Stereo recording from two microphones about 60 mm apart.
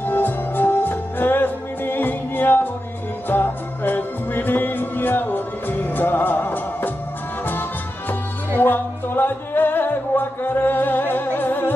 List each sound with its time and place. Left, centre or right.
0.0 s music: left
8.5 s music: left